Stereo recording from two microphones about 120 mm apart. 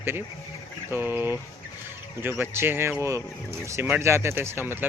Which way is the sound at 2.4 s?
20° right (ahead or behind).